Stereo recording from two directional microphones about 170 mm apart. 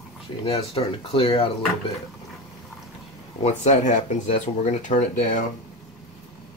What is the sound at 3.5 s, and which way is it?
Speech, 40° left (ahead or behind).